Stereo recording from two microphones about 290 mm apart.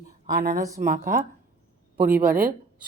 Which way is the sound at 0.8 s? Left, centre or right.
Right.